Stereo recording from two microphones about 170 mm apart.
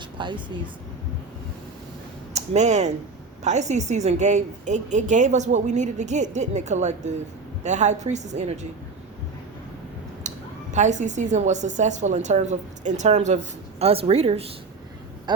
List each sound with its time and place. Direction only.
0.2 s speech: 30° right (ahead or behind)
2.3 s a woman's voice: 40° right (ahead or behind)
10.2 s a woman's voice: 45° right (ahead or behind)